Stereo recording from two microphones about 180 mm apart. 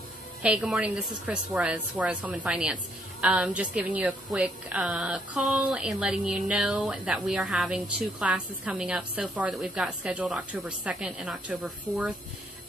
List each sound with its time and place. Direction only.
0.4 s a woman's voice: 5° right (ahead or behind)